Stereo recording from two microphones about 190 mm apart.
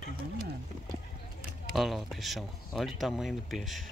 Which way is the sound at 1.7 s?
Centre (ahead or behind).